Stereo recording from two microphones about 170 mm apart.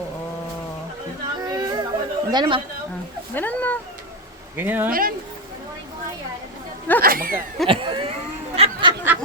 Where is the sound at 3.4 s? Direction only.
10° left (ahead or behind).